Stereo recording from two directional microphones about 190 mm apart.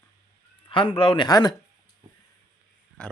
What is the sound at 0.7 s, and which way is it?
Speech, 25° left (ahead or behind).